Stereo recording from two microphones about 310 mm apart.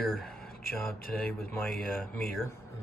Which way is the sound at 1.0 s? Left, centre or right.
Left.